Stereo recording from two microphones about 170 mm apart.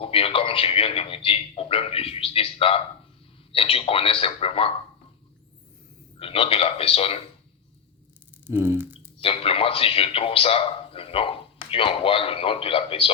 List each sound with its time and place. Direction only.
0.0 s a man's voice: 35° left (ahead or behind)
6.1 s a man's voice: 35° left (ahead or behind)
8.4 s a sound: 15° right (ahead or behind)
9.1 s a man's voice: 35° left (ahead or behind)